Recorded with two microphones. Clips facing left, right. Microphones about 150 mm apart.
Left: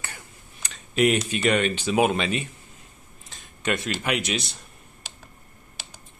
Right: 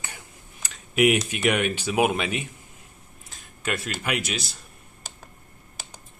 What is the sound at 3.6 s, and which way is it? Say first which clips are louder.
Speech: left 3 dB; 5° right (ahead or behind).